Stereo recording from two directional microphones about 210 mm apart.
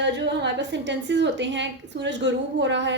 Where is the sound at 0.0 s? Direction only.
55° right (ahead or behind).